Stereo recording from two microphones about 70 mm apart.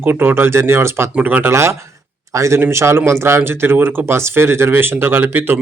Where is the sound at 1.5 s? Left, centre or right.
Right.